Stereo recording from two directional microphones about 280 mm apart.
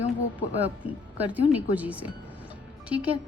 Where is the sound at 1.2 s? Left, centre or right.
Centre.